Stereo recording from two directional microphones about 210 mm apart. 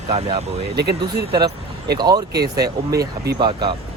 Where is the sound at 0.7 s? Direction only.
50° right (ahead or behind).